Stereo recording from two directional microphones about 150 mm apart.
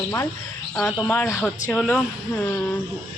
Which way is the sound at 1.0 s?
15° left (ahead or behind).